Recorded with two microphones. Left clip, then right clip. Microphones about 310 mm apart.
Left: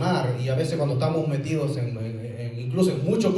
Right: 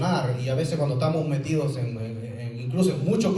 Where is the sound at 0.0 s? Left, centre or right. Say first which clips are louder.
Left 1 dB; centre.